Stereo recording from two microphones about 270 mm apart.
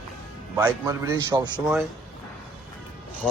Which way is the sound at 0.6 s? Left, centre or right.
Centre.